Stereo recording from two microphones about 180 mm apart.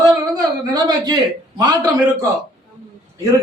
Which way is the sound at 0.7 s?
20° right (ahead or behind).